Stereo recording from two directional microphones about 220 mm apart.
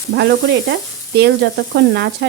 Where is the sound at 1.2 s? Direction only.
50° right (ahead or behind).